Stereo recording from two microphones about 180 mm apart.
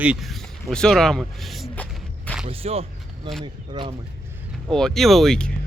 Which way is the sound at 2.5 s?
35° right (ahead or behind).